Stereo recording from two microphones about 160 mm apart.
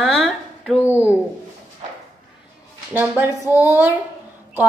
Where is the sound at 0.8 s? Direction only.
15° left (ahead or behind).